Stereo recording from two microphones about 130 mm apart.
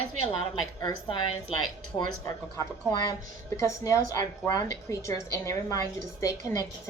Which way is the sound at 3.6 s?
25° left (ahead or behind).